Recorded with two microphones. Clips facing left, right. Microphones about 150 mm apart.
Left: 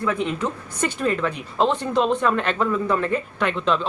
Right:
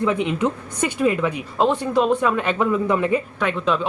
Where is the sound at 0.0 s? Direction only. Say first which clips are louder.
Right 3 dB; 20° right (ahead or behind).